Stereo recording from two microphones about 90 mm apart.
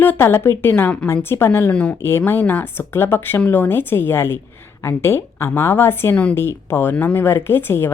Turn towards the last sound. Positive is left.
turn(degrees=25)  # may be behind; listen again after turning